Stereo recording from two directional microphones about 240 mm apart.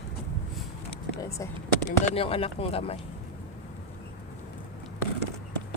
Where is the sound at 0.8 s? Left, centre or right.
Centre.